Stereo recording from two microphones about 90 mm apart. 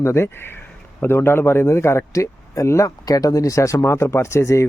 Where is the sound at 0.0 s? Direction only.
30° left (ahead or behind).